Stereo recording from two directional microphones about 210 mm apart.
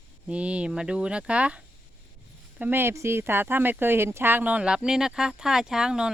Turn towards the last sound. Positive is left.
turn(degrees=-5)  # may be behind; listen again after turning